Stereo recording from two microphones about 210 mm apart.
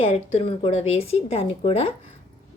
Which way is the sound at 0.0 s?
25° left (ahead or behind).